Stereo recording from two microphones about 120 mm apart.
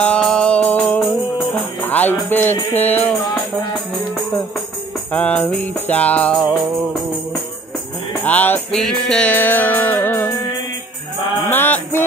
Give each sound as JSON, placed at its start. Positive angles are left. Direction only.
{"t": 0.0, "sound": "music", "side_deg": 10}
{"t": 5.1, "sound": "music", "side_deg": 15}
{"t": 8.2, "sound": "music", "side_deg": 15}
{"t": 8.7, "sound": "music", "side_deg": 5}
{"t": 9.3, "sound": "music", "side_deg": 15}
{"t": 11.4, "sound": "music", "side_deg": 15}